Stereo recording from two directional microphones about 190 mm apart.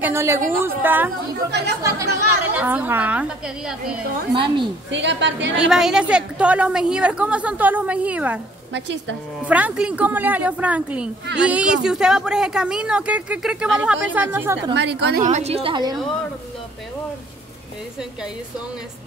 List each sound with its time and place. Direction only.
0.0 s a woman's voice: 15° right (ahead or behind)
4.3 s a woman's voice: 25° right (ahead or behind)
4.9 s a woman's voice: 70° right (ahead or behind)
5.7 s a woman's voice: 5° right (ahead or behind)
8.7 s a woman's voice: 70° right (ahead or behind)
9.4 s a woman's voice: 5° right (ahead or behind)
14.7 s a woman's voice: 65° right (ahead or behind)
15.2 s a woman's voice: 35° right (ahead or behind)